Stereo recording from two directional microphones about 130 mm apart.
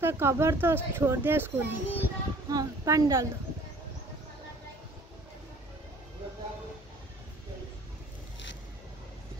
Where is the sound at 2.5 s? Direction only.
30° right (ahead or behind).